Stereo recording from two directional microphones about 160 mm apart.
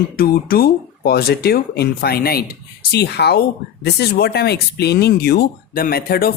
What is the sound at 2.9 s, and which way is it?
Speech, 90° left.